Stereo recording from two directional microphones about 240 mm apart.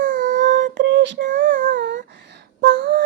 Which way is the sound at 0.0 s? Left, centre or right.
Right.